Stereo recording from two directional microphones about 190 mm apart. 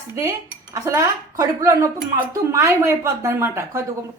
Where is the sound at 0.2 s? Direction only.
15° right (ahead or behind).